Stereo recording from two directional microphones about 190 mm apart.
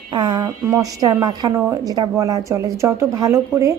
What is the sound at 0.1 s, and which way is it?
A woman's voice, 25° right (ahead or behind).